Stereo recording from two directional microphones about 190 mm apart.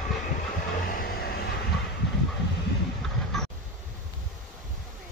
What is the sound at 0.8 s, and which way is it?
Vehicle, 50° left (ahead or behind).